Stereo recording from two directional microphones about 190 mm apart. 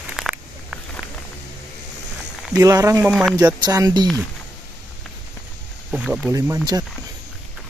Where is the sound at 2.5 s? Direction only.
20° right (ahead or behind).